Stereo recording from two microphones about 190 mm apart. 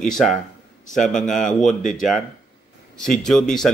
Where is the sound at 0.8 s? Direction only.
40° left (ahead or behind).